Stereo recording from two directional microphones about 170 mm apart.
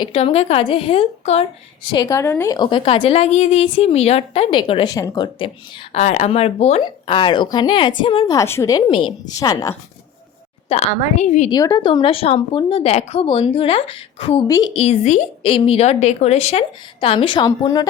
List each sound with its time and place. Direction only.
0.0 s a woman's voice: 35° left (ahead or behind)
1.9 s a woman's voice: 25° left (ahead or behind)
5.9 s a woman's voice: 40° left (ahead or behind); by 8.8 s 15° left (ahead or behind)
8.9 s a woman's voice: 30° left (ahead or behind)
10.7 s a woman's voice: 40° left (ahead or behind)
11.5 s a woman's voice: 25° left (ahead or behind)
14.4 s a woman's voice: 20° left (ahead or behind)
14.7 s a woman's voice: 35° left (ahead or behind)